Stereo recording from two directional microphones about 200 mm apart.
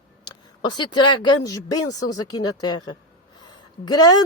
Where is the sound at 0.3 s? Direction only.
20° left (ahead or behind).